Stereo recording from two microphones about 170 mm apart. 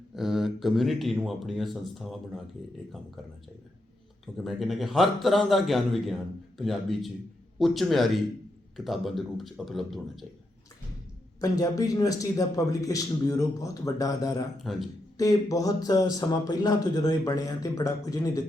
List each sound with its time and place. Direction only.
0.2 s speech: centre (ahead or behind)
4.4 s speech: centre (ahead or behind)
11.3 s speech: 20° left (ahead or behind)
14.6 s speech: centre (ahead or behind)
15.2 s speech: 20° left (ahead or behind)